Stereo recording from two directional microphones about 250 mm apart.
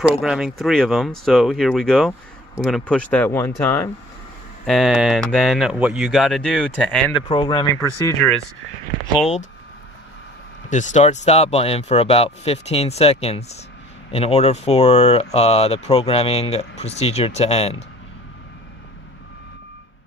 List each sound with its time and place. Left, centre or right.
0.0 s speech: centre
7.2 s speech: centre
8.2 s speech: centre
10.7 s speech: left